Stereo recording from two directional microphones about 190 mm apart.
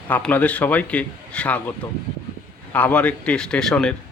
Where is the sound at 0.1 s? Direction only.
10° left (ahead or behind).